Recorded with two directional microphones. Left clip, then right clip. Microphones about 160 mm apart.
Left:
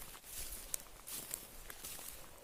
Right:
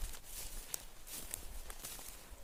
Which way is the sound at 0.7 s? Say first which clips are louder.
Even; 25° left (ahead or behind).